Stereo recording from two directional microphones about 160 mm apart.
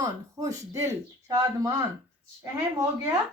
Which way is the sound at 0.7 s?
20° right (ahead or behind).